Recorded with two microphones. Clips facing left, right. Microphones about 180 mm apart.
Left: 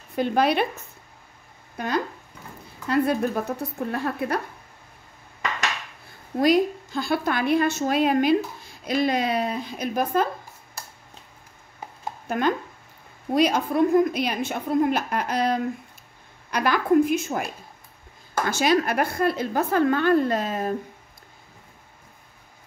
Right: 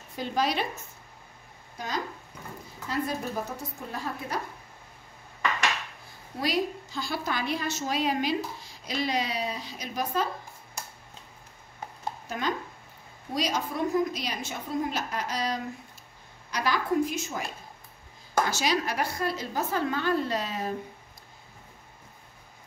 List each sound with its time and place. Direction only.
0.1 s a woman's voice: 60° left (ahead or behind)
1.8 s a woman's voice: 60° left (ahead or behind)
6.4 s a woman's voice: 50° left (ahead or behind)
12.3 s a woman's voice: 55° left (ahead or behind)
18.5 s a woman's voice: 55° left (ahead or behind)